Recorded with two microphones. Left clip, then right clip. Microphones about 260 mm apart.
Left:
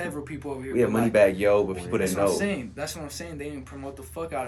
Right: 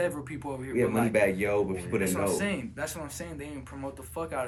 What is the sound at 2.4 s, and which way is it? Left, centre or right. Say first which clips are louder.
Speech: left 3 dB; centre.